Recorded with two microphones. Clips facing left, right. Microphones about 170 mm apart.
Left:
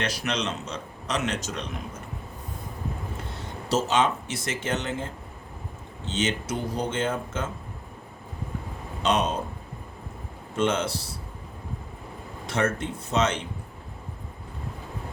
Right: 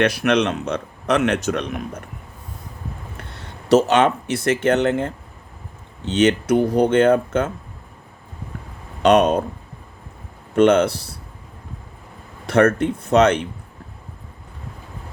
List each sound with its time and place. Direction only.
0.0 s speech: 60° right (ahead or behind)
3.2 s speech: 65° right (ahead or behind)
9.0 s speech: 65° right (ahead or behind)
10.5 s speech: 65° right (ahead or behind)
12.5 s speech: 60° right (ahead or behind)